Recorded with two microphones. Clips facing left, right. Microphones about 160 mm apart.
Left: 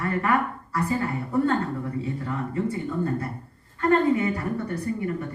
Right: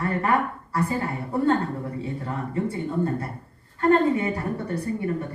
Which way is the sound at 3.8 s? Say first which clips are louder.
Right 1 dB; 30° right (ahead or behind).